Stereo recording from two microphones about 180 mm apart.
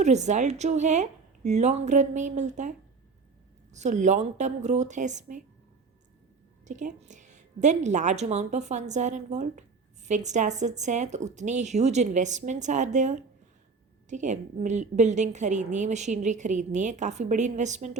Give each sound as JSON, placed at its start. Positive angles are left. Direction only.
{"t": 0.0, "sound": "a woman's voice", "side_deg": -40}
{"t": 6.7, "sound": "a woman's voice", "side_deg": -40}